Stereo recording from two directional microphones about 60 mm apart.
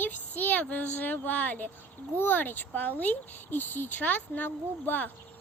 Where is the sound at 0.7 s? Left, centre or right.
Left.